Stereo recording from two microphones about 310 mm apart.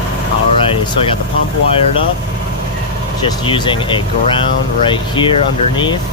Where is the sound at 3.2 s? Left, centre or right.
Centre.